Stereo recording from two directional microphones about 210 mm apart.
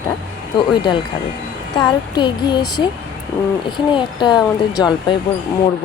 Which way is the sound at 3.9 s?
20° left (ahead or behind).